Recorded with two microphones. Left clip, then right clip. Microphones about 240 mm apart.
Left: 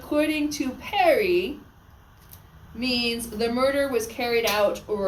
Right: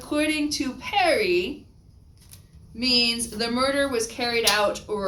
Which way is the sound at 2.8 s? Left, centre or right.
Centre.